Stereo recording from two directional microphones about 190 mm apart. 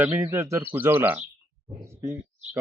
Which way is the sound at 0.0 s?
10° right (ahead or behind).